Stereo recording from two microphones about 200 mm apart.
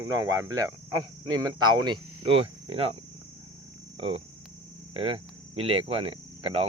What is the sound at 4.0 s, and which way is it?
Speech, 30° right (ahead or behind).